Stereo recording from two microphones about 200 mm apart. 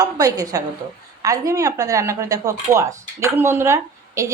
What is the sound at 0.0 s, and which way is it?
A woman's voice, 20° right (ahead or behind).